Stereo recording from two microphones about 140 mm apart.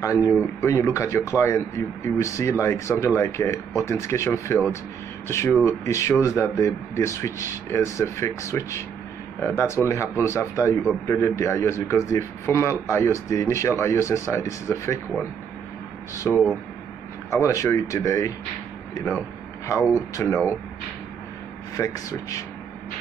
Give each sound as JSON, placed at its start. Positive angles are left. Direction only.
{"t": 0.0, "sound": "a man's voice", "side_deg": 20}
{"t": 16.3, "sound": "speech", "side_deg": -5}
{"t": 17.3, "sound": "a man's voice", "side_deg": 20}
{"t": 19.6, "sound": "a man's voice", "side_deg": 20}
{"t": 21.7, "sound": "a man's voice", "side_deg": 25}